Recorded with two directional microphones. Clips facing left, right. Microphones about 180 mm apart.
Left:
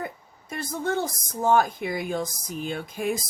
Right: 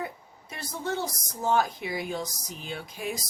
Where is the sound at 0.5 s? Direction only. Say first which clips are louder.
Left 5 dB; 50° left (ahead or behind).